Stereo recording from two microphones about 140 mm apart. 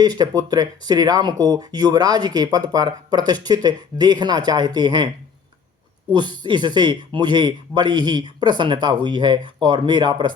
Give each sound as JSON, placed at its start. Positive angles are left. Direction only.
{"t": 0.0, "sound": "speech", "side_deg": -30}
{"t": 6.1, "sound": "a man's voice", "side_deg": -30}